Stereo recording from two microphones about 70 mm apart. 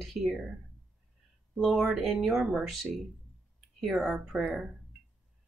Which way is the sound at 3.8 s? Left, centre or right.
Centre.